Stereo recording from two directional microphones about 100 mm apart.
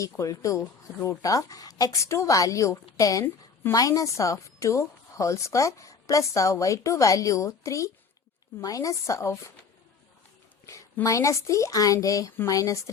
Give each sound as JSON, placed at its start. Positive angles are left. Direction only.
{"t": 0.0, "sound": "a woman's voice", "side_deg": 35}
{"t": 3.2, "sound": "a woman's voice", "side_deg": 25}
{"t": 3.8, "sound": "a woman's voice", "side_deg": 35}
{"t": 11.0, "sound": "a woman's voice", "side_deg": 30}